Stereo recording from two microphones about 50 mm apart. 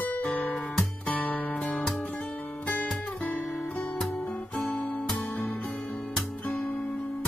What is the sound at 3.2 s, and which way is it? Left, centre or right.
Music, left.